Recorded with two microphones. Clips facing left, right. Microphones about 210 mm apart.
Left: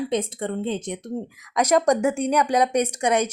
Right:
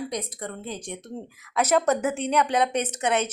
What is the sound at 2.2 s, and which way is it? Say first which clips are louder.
Speech: left 3 dB; 10° left (ahead or behind).